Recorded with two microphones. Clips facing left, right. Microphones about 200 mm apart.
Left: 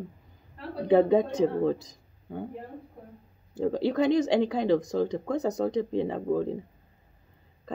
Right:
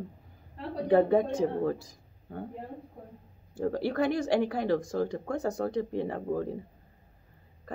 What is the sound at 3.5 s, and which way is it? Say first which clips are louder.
Speech: left 3 dB; 20° left (ahead or behind).